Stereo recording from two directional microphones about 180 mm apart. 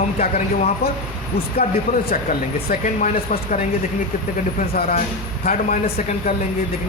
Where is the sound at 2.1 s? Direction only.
45° left (ahead or behind).